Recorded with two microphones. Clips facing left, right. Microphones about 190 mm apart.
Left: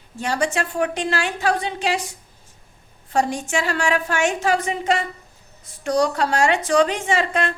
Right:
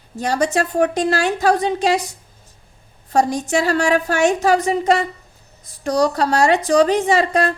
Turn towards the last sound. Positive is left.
turn(degrees=-40)  # may be behind; listen again after turning